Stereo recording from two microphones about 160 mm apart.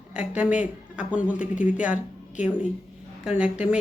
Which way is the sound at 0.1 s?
5° right (ahead or behind).